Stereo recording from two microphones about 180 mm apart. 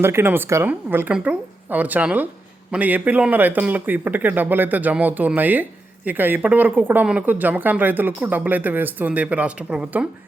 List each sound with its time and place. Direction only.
0.0 s speech: 10° right (ahead or behind)